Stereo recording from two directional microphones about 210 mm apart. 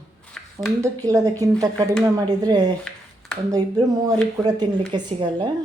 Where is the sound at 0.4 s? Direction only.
5° left (ahead or behind).